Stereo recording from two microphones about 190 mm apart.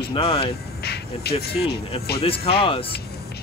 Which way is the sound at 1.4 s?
55° left (ahead or behind).